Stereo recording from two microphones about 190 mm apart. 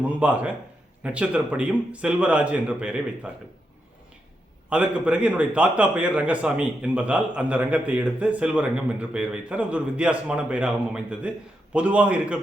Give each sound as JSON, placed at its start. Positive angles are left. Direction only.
{"t": 0.2, "sound": "a man's voice", "side_deg": -5}
{"t": 4.7, "sound": "a man's voice", "side_deg": -5}